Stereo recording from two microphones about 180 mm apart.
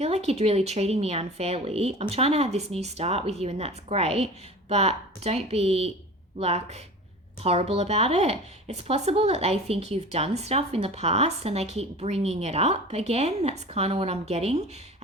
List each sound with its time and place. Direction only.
0.0 s speech: 35° right (ahead or behind)